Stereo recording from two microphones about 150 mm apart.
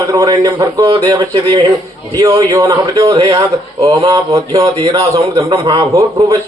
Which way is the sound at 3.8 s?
35° right (ahead or behind).